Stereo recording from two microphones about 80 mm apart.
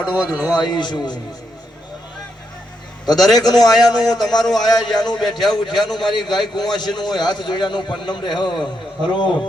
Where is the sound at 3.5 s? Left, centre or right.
Left.